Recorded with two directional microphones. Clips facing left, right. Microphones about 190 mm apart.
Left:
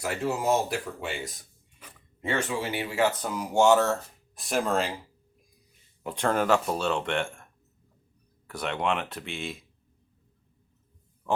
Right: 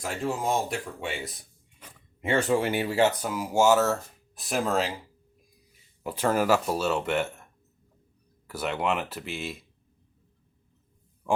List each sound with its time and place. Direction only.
0.0 s speech: 5° left (ahead or behind)
2.5 s speech: 45° right (ahead or behind)
3.1 s speech: 10° right (ahead or behind)
6.0 s speech: 5° right (ahead or behind)
8.4 s speech: 5° right (ahead or behind)